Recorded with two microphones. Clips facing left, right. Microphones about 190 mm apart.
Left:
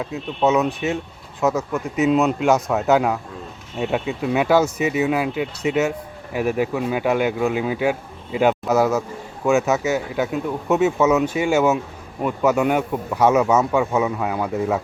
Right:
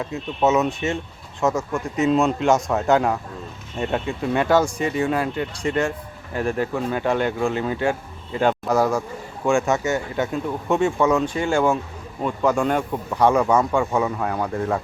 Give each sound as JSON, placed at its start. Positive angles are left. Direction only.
{"t": 0.0, "sound": "speech", "side_deg": 0}